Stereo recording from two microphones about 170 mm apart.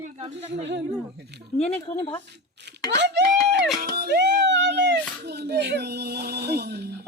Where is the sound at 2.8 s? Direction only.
90° right.